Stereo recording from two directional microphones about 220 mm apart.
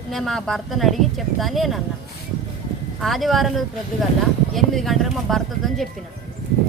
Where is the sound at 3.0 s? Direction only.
Centre (ahead or behind).